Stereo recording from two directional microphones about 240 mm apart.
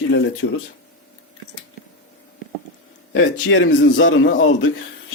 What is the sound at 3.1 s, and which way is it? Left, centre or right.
A man's voice, left.